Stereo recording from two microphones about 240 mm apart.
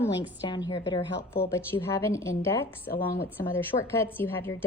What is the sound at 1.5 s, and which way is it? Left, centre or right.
A woman's voice, centre.